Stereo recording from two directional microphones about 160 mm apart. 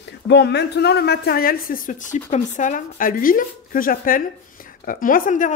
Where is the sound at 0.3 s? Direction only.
90° left.